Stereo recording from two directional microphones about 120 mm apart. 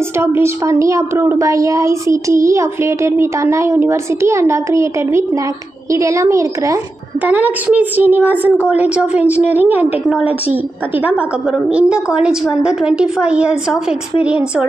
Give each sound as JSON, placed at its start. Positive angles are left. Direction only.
{"t": 0.2, "sound": "a woman's voice", "side_deg": -20}
{"t": 7.2, "sound": "a woman's voice", "side_deg": -15}
{"t": 10.0, "sound": "a woman's voice", "side_deg": -5}